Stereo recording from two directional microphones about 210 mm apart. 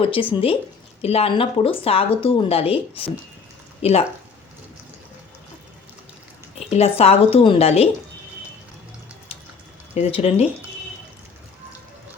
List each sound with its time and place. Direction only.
0.0 s speech: 25° left (ahead or behind)
6.7 s speech: 30° left (ahead or behind)
9.9 s speech: 30° left (ahead or behind)